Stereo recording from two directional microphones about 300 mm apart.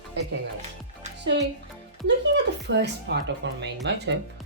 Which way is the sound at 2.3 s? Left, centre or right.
Right.